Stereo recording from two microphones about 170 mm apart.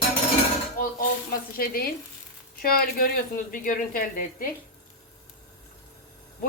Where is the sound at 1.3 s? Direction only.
60° left (ahead or behind).